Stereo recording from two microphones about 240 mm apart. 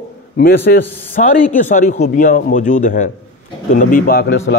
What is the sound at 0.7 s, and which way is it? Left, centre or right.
A man's voice, left.